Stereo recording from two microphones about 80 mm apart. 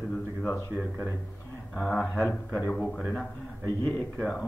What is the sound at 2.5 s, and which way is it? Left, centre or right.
Speech, left.